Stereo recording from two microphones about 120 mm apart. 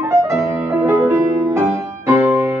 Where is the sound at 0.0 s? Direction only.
20° right (ahead or behind).